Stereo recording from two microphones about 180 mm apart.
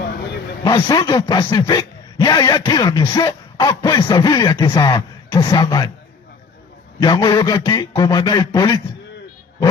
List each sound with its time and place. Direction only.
0.6 s speech: 25° left (ahead or behind)
7.0 s speech: 25° left (ahead or behind)